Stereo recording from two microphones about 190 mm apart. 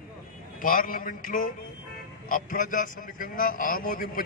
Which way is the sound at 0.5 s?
45° left (ahead or behind).